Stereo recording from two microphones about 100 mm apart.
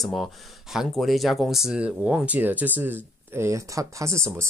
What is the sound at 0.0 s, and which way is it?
Speech, centre (ahead or behind).